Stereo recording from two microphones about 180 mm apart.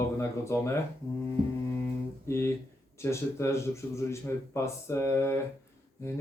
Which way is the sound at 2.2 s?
15° left (ahead or behind).